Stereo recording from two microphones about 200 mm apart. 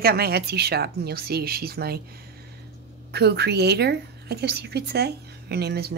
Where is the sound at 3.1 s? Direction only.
55° right (ahead or behind).